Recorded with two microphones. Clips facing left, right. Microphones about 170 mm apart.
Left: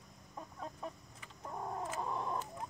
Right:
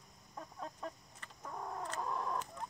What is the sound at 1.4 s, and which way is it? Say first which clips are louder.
Chicken: left 2 dB; 15° left (ahead or behind).